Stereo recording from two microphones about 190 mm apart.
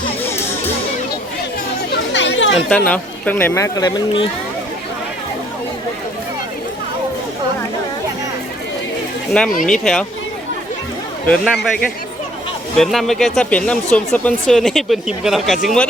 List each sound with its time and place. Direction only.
1.9 s chatter: 70° left (ahead or behind)
2.6 s speech: 5° left (ahead or behind); by 4.3 s 25° left (ahead or behind)
9.6 s speech: centre (ahead or behind)
11.4 s speech: centre (ahead or behind)
12.7 s speech: centre (ahead or behind)